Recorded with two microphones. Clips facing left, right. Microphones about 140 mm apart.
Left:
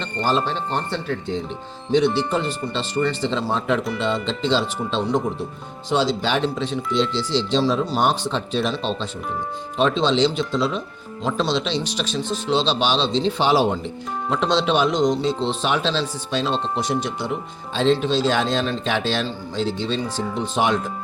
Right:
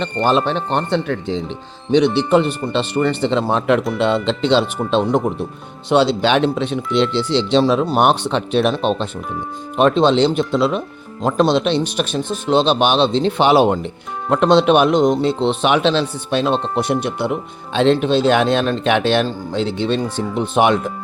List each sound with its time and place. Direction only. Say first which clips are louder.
0.0 s speech: right 5 dB; 65° right (ahead or behind)